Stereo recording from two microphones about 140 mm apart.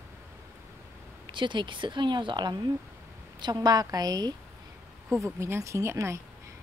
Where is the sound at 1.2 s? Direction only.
35° right (ahead or behind).